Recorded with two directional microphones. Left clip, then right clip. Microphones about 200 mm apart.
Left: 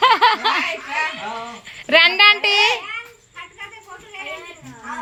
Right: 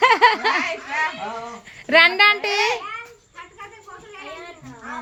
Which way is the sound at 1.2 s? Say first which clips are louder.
Left 1 dB; 5° right (ahead or behind).